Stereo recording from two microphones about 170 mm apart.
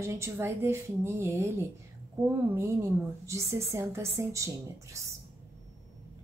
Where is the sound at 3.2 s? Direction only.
15° right (ahead or behind).